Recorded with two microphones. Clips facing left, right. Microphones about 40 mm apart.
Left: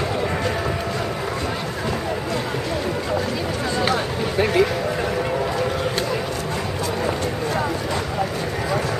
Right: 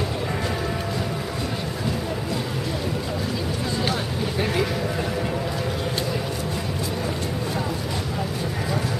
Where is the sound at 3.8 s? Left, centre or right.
Left.